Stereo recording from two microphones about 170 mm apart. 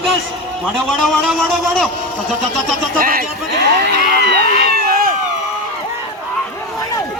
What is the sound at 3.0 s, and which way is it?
Speech, 55° right (ahead or behind).